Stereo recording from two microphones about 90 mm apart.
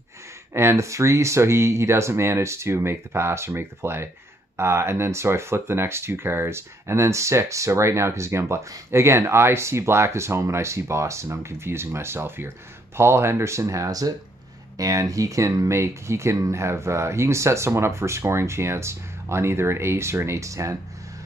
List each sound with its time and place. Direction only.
0.5 s speech: 30° right (ahead or behind)